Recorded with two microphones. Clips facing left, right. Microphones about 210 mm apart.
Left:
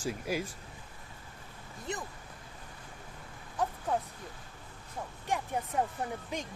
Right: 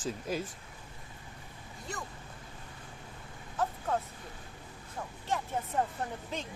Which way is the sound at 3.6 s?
15° left (ahead or behind).